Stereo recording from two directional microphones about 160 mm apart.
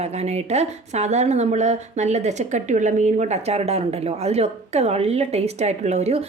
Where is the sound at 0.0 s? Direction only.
40° right (ahead or behind).